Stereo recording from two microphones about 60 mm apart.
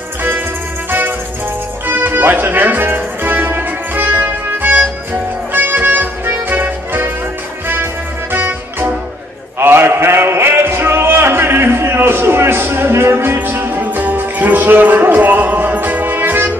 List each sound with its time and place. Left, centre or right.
0.8 s music: right